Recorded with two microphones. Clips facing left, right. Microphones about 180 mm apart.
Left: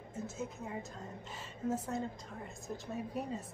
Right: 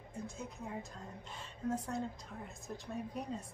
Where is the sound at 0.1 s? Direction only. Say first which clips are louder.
Left 4 dB; 5° left (ahead or behind).